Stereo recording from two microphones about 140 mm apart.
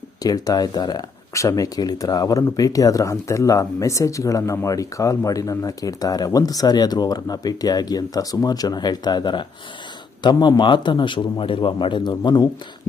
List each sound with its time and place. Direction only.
0.2 s a man's voice: 25° left (ahead or behind)